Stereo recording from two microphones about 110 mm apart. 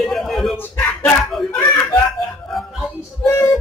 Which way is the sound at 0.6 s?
20° left (ahead or behind).